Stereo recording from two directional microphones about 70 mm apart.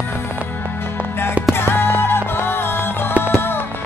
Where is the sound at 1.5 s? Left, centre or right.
Left.